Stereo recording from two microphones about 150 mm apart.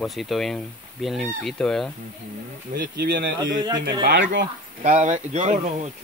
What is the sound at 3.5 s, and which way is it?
Speech, 25° right (ahead or behind).